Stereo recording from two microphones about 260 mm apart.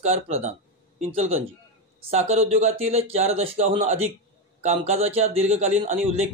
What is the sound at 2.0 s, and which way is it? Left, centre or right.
Speech, right.